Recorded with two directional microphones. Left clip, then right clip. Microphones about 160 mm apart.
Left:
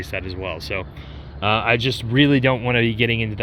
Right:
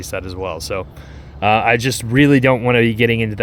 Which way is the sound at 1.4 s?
70° right (ahead or behind).